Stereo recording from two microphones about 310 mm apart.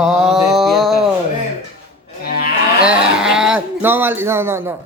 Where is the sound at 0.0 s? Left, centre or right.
Centre.